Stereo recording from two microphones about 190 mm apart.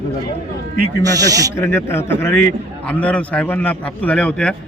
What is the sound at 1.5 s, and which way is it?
A man's voice, 15° left (ahead or behind).